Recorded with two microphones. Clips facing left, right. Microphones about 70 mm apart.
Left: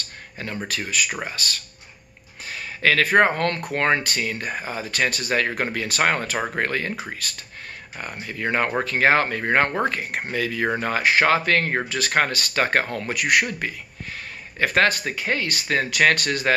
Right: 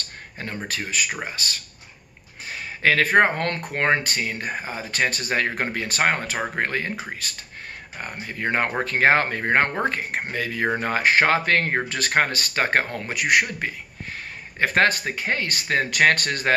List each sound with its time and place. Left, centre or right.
0.7 s speech: right